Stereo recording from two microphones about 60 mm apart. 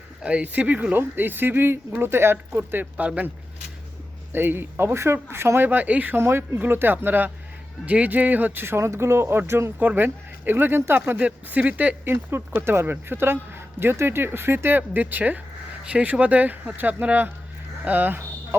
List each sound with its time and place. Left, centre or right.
0.2 s speech: right
2.5 s speech: right
4.3 s speech: right
5.6 s speech: right
6.1 s speech: right
8.6 s speech: right
9.7 s speech: right
11.2 s speech: right
12.0 s speech: right
15.8 s speech: centre